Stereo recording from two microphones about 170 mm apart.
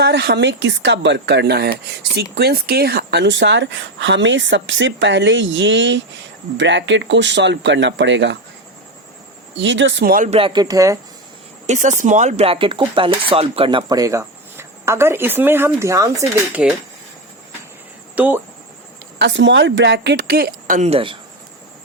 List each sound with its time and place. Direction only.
0.0 s speech: 80° right
9.6 s speech: 90° right; by 10.2 s 65° right (ahead or behind)
10.2 s speech: 35° right (ahead or behind)
11.6 s speech: 45° right (ahead or behind); by 16.2 s 20° right (ahead or behind)
16.6 s speech: 5° right (ahead or behind)
18.1 s speech: 10° right (ahead or behind)
19.2 s speech: 90° right; by 21.2 s 35° right (ahead or behind)